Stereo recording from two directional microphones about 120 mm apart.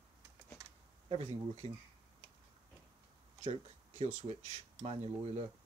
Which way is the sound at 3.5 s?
60° right (ahead or behind).